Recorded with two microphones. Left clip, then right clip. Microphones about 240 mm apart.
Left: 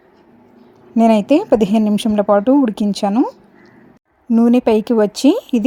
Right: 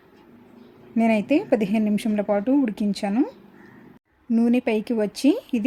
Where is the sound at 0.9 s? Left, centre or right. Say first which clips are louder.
Left 8 dB; left.